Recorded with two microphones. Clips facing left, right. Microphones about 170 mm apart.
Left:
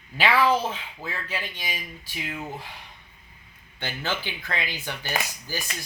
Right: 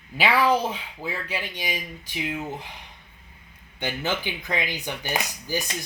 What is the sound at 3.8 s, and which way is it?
Speech, 15° right (ahead or behind).